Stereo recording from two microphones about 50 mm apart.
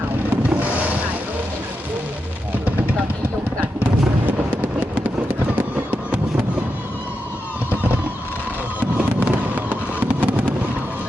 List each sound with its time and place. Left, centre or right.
0.5 s boat: right
4.3 s fireworks: right
8.8 s fireworks: right